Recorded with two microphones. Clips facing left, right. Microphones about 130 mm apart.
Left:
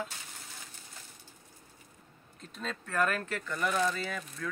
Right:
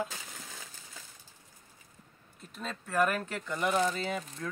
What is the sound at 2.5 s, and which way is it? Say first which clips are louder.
Speech: right 2 dB; 10° right (ahead or behind).